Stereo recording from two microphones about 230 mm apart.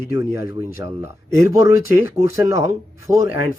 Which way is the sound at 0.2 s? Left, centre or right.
Centre.